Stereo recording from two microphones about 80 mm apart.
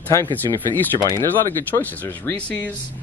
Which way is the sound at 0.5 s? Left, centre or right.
Left.